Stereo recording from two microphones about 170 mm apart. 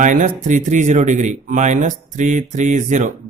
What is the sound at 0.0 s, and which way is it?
Speech, 50° right (ahead or behind).